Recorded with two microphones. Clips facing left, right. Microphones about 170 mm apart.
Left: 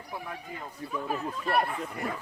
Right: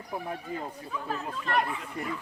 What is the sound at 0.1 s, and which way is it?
Speech, 30° right (ahead or behind).